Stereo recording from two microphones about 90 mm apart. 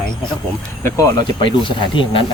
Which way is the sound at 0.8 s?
35° left (ahead or behind).